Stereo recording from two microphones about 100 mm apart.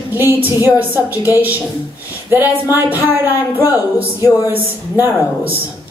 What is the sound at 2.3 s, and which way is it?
Speech, 20° right (ahead or behind).